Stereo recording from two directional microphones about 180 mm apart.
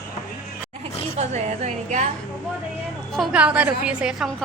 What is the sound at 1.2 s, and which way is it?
Speech, 40° right (ahead or behind).